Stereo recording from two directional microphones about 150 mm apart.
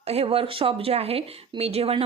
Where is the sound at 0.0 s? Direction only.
45° right (ahead or behind).